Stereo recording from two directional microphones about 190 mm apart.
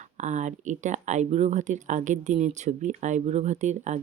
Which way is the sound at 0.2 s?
40° right (ahead or behind).